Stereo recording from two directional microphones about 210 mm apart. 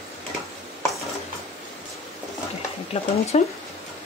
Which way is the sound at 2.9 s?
25° left (ahead or behind).